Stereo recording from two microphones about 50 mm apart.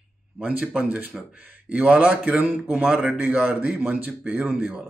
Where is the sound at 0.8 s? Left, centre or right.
Right.